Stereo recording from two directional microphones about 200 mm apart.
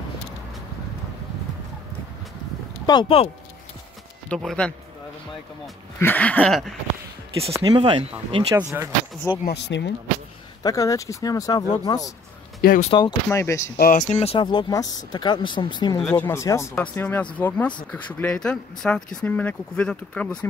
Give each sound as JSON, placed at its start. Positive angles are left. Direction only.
{"t": 2.9, "sound": "speech", "side_deg": 25}
{"t": 4.3, "sound": "speech", "side_deg": 5}
{"t": 5.9, "sound": "speech", "side_deg": 10}
{"t": 7.5, "sound": "speech", "side_deg": -20}
{"t": 8.5, "sound": "speech", "side_deg": -10}
{"t": 9.5, "sound": "speech", "side_deg": 60}
{"t": 10.6, "sound": "speech", "side_deg": 15}
{"t": 12.6, "sound": "speech", "side_deg": 45}
{"t": 12.9, "sound": "speech", "side_deg": 20}
{"t": 13.7, "sound": "speech", "side_deg": 40}